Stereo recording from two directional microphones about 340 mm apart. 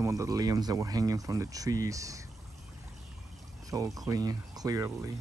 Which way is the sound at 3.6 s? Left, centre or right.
Centre.